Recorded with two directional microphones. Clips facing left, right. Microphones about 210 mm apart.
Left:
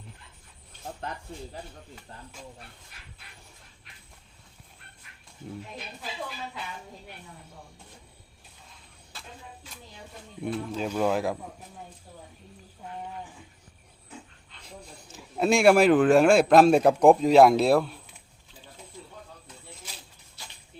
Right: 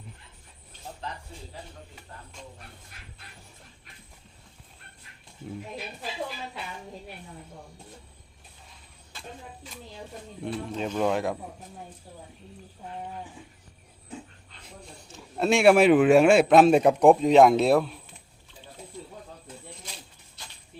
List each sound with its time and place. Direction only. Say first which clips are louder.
1.0 s keys jangling: left 1 dB; 55° left (ahead or behind)
10.4 s speech: left 1 dB; 5° left (ahead or behind)
14.7 s speech: left 1 dB; centre (ahead or behind)